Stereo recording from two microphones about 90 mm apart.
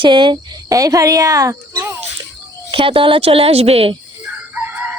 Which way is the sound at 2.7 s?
75° right (ahead or behind).